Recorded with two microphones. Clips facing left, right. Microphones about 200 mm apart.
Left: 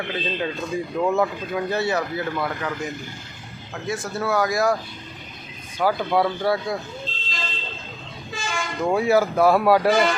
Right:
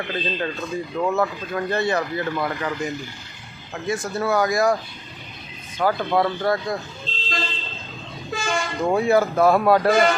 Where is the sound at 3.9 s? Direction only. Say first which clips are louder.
Right 2 dB; centre (ahead or behind).